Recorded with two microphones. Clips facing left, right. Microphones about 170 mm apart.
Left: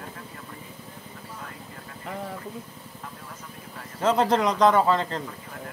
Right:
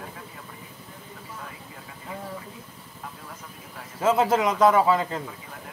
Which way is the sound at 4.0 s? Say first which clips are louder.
Even; 5° right (ahead or behind).